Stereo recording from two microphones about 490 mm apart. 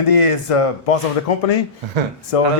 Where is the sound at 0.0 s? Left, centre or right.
Left.